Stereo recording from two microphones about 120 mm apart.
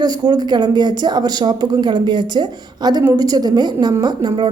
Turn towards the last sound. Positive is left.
turn(degrees=-35)  # may be behind; listen again after turning